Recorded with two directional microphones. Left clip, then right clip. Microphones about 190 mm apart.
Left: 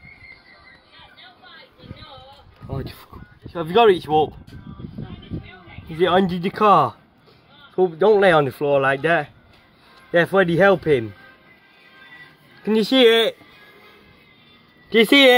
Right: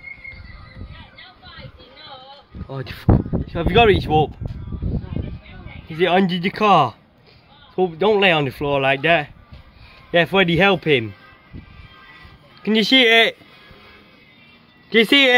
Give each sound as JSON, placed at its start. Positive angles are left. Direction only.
{"t": 2.8, "sound": "speech", "side_deg": -25}
{"t": 3.4, "sound": "speech", "side_deg": -10}
{"t": 5.9, "sound": "speech", "side_deg": -5}
{"t": 12.6, "sound": "speech", "side_deg": -10}
{"t": 14.9, "sound": "speech", "side_deg": -5}